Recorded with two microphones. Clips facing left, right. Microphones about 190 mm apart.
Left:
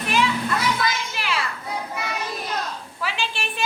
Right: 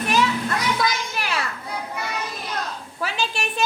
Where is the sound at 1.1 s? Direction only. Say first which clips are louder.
Even; 45° right (ahead or behind).